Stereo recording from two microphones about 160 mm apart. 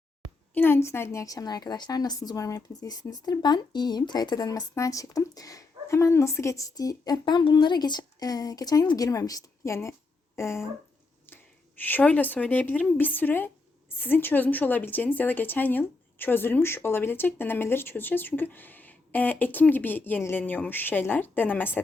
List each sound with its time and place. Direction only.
0.5 s a woman's voice: 15° left (ahead or behind)
11.8 s a woman's voice: 10° left (ahead or behind)